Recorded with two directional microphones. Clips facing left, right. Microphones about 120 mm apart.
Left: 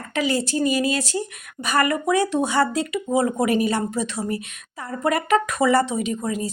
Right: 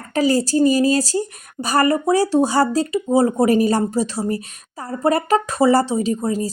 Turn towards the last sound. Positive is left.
turn(degrees=-35)  # may be behind; listen again after turning